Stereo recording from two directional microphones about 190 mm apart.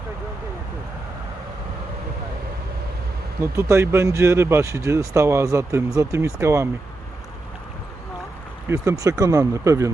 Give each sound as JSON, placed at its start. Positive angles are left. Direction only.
{"t": 3.4, "sound": "speech", "side_deg": -15}
{"t": 8.7, "sound": "speech", "side_deg": -15}